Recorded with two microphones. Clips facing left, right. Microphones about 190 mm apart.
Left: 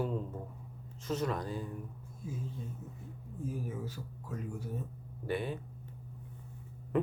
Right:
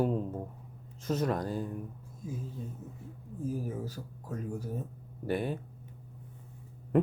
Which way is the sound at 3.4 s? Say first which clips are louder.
Right 4 dB; 40° right (ahead or behind).